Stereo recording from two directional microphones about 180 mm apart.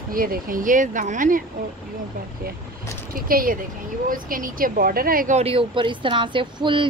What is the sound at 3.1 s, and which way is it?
Speech, 50° right (ahead or behind).